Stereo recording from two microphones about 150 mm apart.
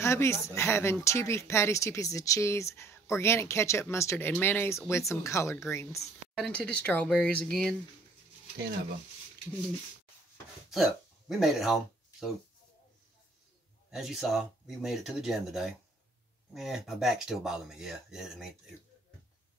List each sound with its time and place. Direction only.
0.0 s speech: 20° left (ahead or behind)
6.3 s speech: 5° left (ahead or behind)
10.7 s speech: centre (ahead or behind)
13.8 s speech: centre (ahead or behind)